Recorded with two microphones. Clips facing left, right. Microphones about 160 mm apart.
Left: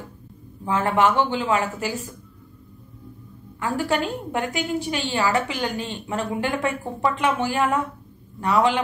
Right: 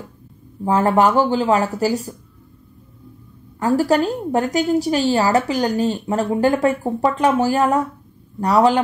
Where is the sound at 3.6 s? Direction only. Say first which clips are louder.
Right 7 dB; 40° right (ahead or behind).